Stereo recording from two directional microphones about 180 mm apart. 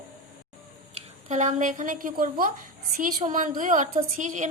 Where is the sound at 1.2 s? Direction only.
40° right (ahead or behind).